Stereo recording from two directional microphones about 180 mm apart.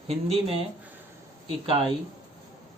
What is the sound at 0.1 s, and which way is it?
Speech, 35° right (ahead or behind).